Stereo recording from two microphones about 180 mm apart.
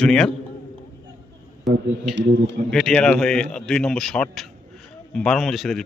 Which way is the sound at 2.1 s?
85° right.